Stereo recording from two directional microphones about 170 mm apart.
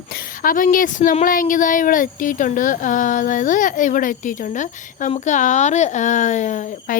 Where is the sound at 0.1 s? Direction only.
60° left (ahead or behind).